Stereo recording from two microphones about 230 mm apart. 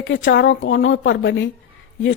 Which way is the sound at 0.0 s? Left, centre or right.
Left.